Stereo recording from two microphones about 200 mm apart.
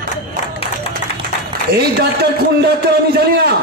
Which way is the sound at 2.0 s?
55° right (ahead or behind).